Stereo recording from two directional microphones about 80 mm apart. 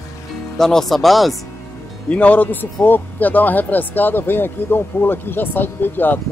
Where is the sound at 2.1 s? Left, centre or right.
Centre.